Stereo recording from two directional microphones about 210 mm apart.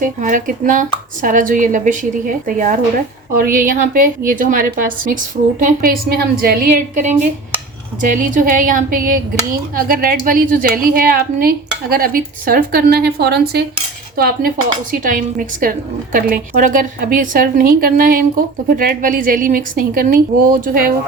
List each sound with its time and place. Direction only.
0.0 s a woman's voice: 40° right (ahead or behind)